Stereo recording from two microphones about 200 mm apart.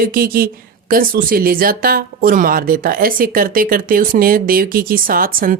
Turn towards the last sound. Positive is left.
turn(degrees=-45)  # may be behind; listen again after turning